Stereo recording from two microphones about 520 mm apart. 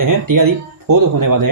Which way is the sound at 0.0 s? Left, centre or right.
Right.